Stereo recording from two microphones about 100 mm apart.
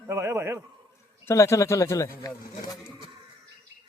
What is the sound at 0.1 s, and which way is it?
Speech, 25° right (ahead or behind).